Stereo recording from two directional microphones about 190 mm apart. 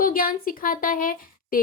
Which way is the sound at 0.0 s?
50° left (ahead or behind).